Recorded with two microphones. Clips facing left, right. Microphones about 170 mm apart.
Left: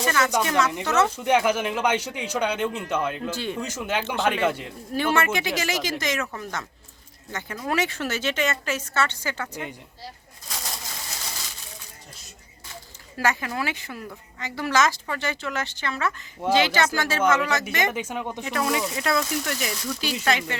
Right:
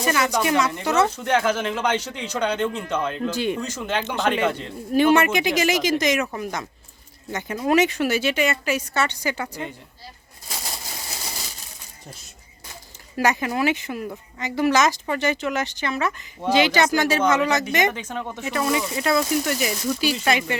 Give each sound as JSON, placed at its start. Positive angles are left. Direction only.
{"t": 0.0, "sound": "speech", "side_deg": -10}
{"t": 1.1, "sound": "speech", "side_deg": 10}
{"t": 3.2, "sound": "speech", "side_deg": -15}
{"t": 3.6, "sound": "speech", "side_deg": 10}
{"t": 4.9, "sound": "speech", "side_deg": -20}
{"t": 13.1, "sound": "speech", "side_deg": -15}
{"t": 17.9, "sound": "speech", "side_deg": 10}
{"t": 18.4, "sound": "speech", "side_deg": 0}